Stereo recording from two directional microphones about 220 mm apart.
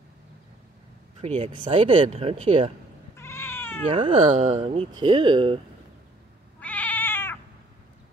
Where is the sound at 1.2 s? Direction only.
25° right (ahead or behind).